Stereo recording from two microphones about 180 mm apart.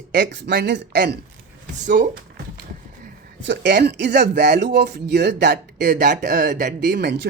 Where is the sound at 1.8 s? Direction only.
45° right (ahead or behind).